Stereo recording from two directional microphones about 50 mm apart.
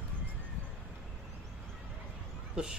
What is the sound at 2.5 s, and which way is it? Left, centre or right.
Speech, centre.